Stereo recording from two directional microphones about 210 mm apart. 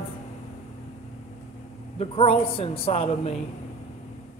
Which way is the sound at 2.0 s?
25° left (ahead or behind).